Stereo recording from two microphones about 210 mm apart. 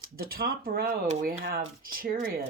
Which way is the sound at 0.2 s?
45° right (ahead or behind).